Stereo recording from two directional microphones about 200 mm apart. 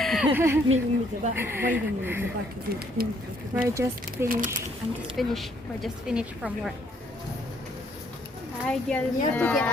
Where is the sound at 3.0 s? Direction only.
50° right (ahead or behind).